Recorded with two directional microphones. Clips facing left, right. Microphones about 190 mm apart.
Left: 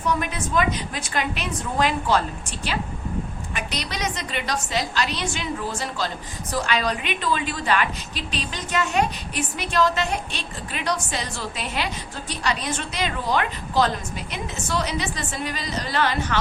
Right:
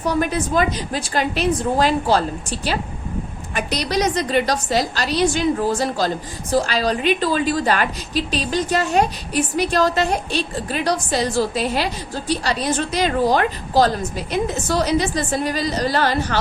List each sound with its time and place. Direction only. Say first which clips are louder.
0.0 s a woman's voice: right 5 dB; 35° right (ahead or behind)